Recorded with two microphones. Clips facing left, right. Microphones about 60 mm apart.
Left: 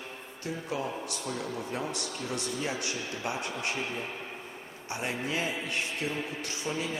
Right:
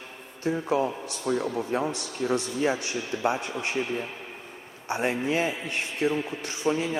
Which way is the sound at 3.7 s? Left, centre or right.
Centre.